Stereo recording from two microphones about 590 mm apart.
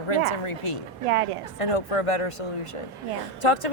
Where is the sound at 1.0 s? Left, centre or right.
Right.